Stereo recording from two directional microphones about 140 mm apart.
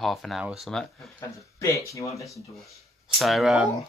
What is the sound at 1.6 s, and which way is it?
Speech, 20° left (ahead or behind).